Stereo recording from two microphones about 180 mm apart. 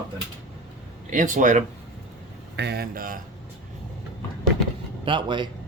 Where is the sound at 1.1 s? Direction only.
45° right (ahead or behind).